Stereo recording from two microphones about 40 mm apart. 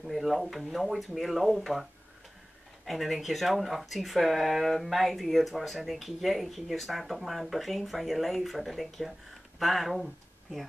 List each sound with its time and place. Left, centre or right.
0.0 s speech: centre
2.8 s speech: centre